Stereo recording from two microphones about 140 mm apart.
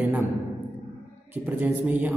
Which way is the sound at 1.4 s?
15° right (ahead or behind).